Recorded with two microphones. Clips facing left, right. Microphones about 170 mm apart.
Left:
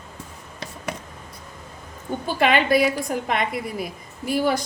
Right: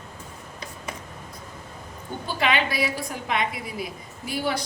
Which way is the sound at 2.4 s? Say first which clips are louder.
Left 6 dB; 50° left (ahead or behind).